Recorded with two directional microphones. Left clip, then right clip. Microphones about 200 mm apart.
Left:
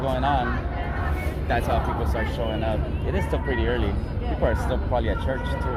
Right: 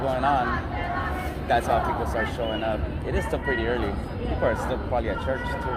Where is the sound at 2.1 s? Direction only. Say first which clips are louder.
Right 1 dB; 10° left (ahead or behind).